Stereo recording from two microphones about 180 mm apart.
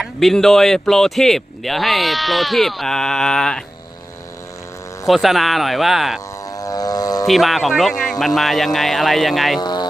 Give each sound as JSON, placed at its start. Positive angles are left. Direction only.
{"t": 0.0, "sound": "speech", "side_deg": 0}
{"t": 5.0, "sound": "speech", "side_deg": 0}
{"t": 6.4, "sound": "vehicle", "side_deg": 20}
{"t": 7.3, "sound": "speech", "side_deg": 0}
{"t": 9.6, "sound": "a sound", "side_deg": 25}